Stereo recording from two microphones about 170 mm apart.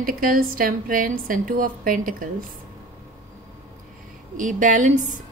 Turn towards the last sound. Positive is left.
turn(degrees=-45)  # may be behind; listen again after turning